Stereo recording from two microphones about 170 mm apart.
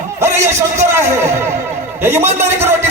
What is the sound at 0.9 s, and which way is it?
A man's voice, 15° right (ahead or behind).